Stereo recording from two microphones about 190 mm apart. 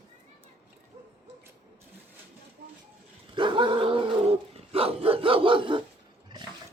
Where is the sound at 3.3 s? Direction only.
25° right (ahead or behind).